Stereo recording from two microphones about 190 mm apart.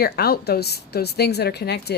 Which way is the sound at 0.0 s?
55° left (ahead or behind).